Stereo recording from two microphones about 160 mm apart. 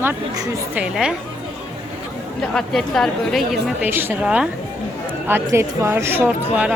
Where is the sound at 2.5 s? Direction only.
5° left (ahead or behind).